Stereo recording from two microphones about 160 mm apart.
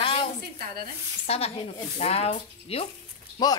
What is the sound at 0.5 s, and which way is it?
Speech, 70° right (ahead or behind).